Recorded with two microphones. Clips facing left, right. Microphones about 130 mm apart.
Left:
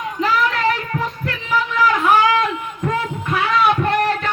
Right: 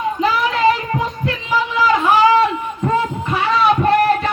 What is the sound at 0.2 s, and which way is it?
Child singing, 10° right (ahead or behind).